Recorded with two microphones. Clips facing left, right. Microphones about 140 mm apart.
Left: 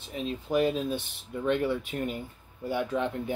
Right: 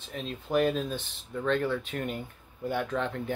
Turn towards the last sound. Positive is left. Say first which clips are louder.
# left 2 dB
turn(degrees=15)  # may be behind; listen again after turning